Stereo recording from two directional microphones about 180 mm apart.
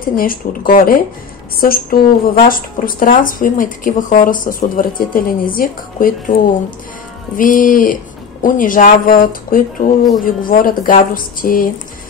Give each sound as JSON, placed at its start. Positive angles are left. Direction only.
{"t": 0.1, "sound": "speech", "side_deg": 50}